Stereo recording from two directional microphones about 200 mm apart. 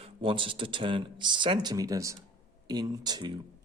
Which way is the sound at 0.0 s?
25° right (ahead or behind).